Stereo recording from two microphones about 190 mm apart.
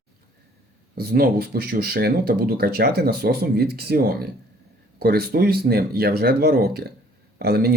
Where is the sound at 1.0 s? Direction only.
55° right (ahead or behind).